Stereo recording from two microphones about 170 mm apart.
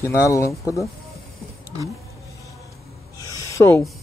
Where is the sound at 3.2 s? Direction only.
20° left (ahead or behind).